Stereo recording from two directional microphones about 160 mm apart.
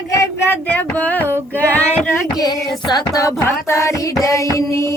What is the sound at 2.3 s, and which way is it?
Female singing, 25° left (ahead or behind).